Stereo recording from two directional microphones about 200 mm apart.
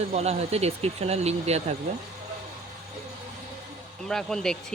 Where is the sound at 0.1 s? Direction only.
30° right (ahead or behind).